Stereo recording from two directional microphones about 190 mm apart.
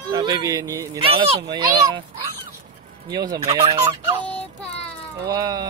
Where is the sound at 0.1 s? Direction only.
20° right (ahead or behind).